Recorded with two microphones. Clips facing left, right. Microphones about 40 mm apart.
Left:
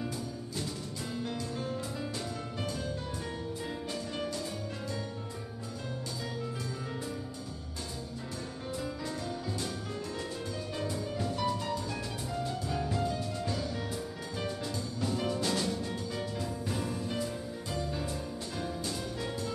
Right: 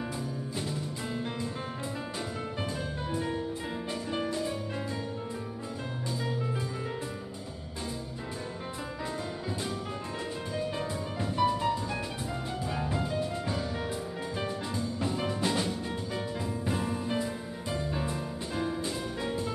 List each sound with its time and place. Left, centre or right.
0.6 s music: right
2.6 s music: right
9.0 s music: right